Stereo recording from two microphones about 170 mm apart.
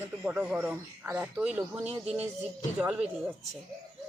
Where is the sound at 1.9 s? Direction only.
40° right (ahead or behind).